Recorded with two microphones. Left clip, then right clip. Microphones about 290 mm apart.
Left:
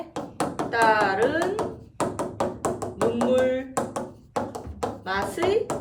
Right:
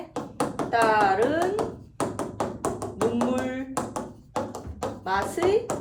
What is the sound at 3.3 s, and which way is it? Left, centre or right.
Tap, centre.